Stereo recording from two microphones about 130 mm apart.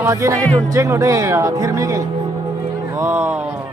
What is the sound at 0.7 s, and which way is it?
Speech, 25° right (ahead or behind).